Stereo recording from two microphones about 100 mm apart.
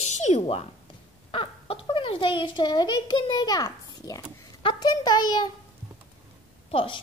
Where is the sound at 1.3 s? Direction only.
60° left (ahead or behind).